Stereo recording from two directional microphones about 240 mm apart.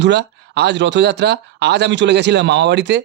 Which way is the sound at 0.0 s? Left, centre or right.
Right.